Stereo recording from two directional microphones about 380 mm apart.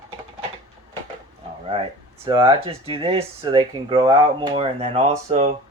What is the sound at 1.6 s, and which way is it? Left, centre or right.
Speech, centre.